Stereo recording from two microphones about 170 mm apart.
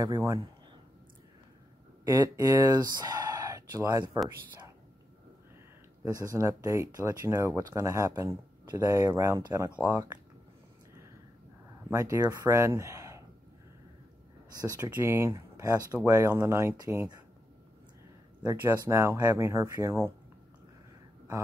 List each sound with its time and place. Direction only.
0.0 s a man's voice: 20° right (ahead or behind)
2.0 s speech: 20° right (ahead or behind)
6.0 s speech: 20° right (ahead or behind)
11.9 s speech: 20° right (ahead or behind)
14.6 s a man's voice: 20° right (ahead or behind)
18.6 s speech: 15° right (ahead or behind)